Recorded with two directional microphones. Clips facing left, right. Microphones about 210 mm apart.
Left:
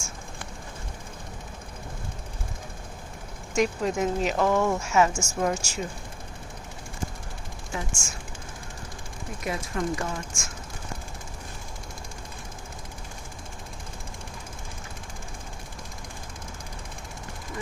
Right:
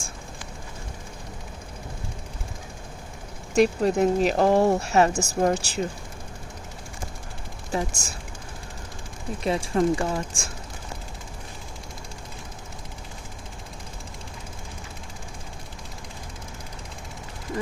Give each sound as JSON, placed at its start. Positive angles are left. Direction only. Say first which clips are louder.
{"t": 3.5, "sound": "speech", "louder": "right 5 dB", "side_deg": -35}
{"t": 7.7, "sound": "speech", "louder": "right 7 dB", "side_deg": -35}
{"t": 9.4, "sound": "speech", "louder": "right 7 dB", "side_deg": -30}